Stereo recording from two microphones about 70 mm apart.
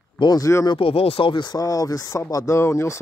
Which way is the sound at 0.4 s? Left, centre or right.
Left.